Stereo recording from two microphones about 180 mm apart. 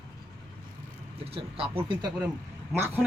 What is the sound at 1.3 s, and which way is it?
Speech, 30° right (ahead or behind).